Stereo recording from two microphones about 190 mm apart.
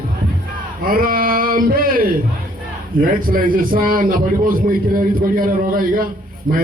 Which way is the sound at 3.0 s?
50° right (ahead or behind).